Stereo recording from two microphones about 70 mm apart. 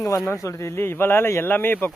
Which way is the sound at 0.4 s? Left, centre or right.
Left.